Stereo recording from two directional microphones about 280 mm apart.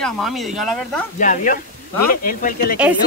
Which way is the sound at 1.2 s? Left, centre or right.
Left.